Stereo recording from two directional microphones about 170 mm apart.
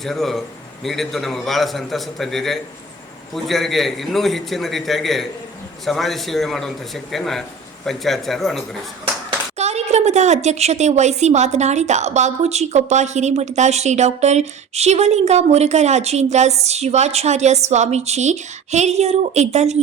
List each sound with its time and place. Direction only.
0.0 s a man's voice: centre (ahead or behind)
9.6 s speech: 40° right (ahead or behind)